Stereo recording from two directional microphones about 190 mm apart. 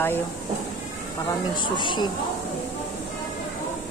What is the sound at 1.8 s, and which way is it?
Speech, 25° left (ahead or behind).